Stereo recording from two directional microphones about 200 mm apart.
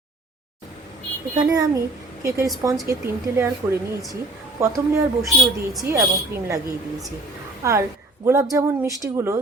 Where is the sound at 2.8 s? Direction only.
15° right (ahead or behind).